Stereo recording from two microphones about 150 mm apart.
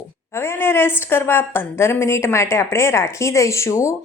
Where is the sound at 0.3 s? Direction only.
15° left (ahead or behind).